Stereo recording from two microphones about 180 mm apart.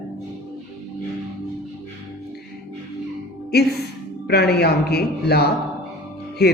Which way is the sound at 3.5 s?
65° left (ahead or behind).